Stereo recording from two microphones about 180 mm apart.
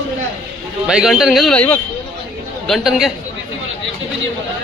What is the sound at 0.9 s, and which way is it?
Speech, 5° right (ahead or behind).